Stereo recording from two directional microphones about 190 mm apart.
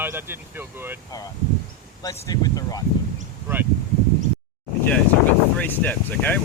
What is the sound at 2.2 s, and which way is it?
Speech, 20° left (ahead or behind).